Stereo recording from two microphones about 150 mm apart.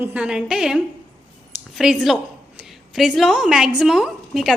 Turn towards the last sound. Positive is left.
turn(degrees=0)  # may be behind; listen again after turning